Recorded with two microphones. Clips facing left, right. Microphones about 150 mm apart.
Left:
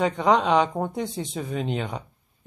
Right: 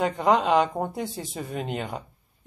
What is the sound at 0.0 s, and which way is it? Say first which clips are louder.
Speech: left 1 dB; 5° right (ahead or behind).